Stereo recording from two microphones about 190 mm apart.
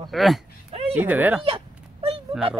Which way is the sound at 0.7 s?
30° right (ahead or behind).